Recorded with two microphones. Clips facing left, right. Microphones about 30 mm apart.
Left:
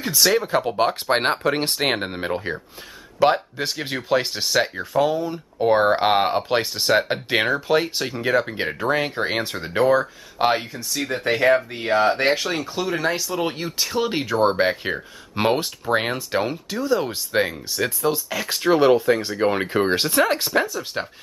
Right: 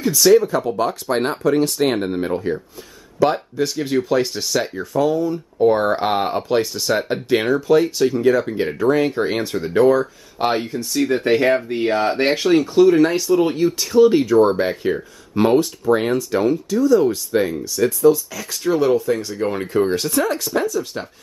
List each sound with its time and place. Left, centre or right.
0.0 s speech: left
0.5 s speech: left; by 10.5 s centre
10.5 s speech: centre; by 21.1 s left